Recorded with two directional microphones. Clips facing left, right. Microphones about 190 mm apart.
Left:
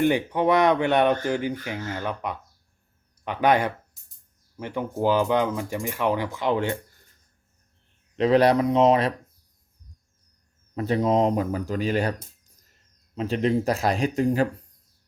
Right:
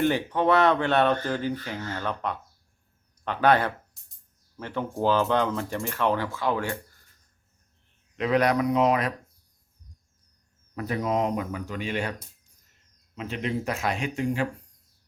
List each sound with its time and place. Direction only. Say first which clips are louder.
0.0 s speech: left 2 dB; 15° left (ahead or behind)
8.1 s speech: left 5 dB; 30° left (ahead or behind)
10.8 s speech: left 5 dB; 25° left (ahead or behind)
13.1 s speech: left 7 dB; 35° left (ahead or behind)